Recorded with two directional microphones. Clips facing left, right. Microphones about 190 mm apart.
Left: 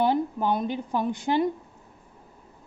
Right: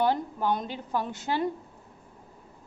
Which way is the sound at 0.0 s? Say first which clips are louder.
Left 3 dB; 15° left (ahead or behind).